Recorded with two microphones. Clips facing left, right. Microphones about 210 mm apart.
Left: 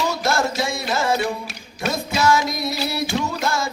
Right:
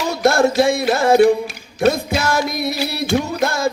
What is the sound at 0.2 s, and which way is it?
Music, 55° right (ahead or behind).